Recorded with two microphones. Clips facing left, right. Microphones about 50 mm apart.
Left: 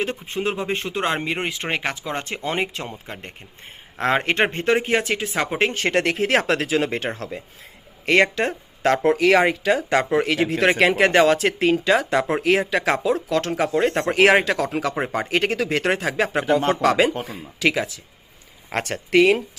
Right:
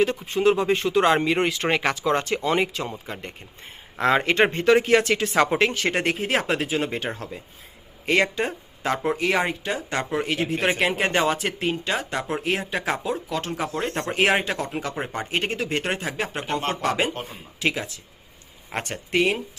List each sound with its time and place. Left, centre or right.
0.0 s speech: left
2.2 s speech: left
4.9 s speech: centre
5.3 s speech: centre
5.5 s speech: left
5.9 s speech: left
7.1 s speech: left
9.0 s speech: left
10.2 s speech: left
14.1 s speech: left
17.6 s speech: left